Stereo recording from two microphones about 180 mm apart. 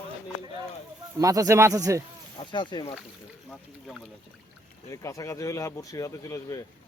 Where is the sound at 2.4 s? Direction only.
25° left (ahead or behind).